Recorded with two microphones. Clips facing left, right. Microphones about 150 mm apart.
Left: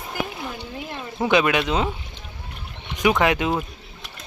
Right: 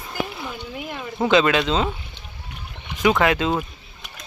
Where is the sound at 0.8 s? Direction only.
15° right (ahead or behind).